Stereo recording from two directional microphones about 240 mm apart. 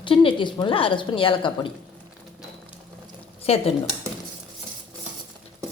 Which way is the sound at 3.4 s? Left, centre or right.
Left.